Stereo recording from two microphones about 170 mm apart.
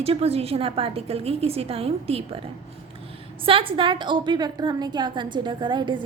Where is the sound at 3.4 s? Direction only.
30° right (ahead or behind).